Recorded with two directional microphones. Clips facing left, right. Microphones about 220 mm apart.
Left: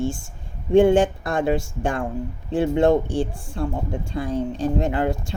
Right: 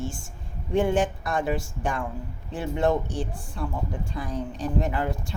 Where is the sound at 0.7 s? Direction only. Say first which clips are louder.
Left 8 dB; 25° left (ahead or behind).